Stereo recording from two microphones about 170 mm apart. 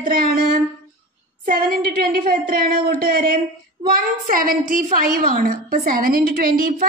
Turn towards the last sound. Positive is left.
turn(degrees=-55)  # may be behind; listen again after turning